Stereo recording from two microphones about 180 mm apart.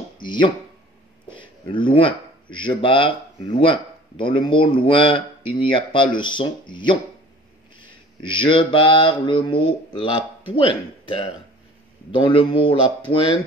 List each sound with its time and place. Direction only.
0.2 s a sound: 25° left (ahead or behind)
2.6 s speech: 30° left (ahead or behind)
7.8 s mantra: 25° left (ahead or behind)
10.5 s speech: 30° left (ahead or behind)